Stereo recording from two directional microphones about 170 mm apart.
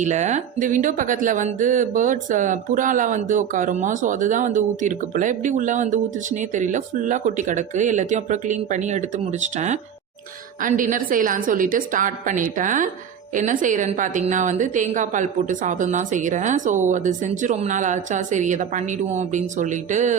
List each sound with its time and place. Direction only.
0.0 s speech: 45° right (ahead or behind)